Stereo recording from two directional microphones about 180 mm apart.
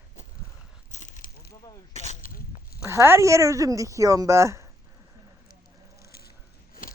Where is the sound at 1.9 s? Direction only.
40° left (ahead or behind).